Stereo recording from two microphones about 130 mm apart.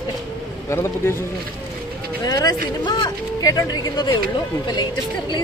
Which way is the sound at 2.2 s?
30° left (ahead or behind).